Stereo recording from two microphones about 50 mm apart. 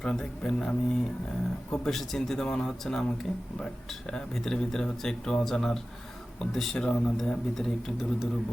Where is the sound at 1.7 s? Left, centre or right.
Centre.